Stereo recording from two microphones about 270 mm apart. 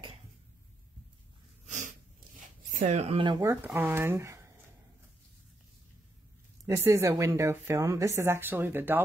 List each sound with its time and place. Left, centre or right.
1.7 s sneeze: right
2.7 s a woman's voice: right; by 4.4 s centre
6.6 s a woman's voice: centre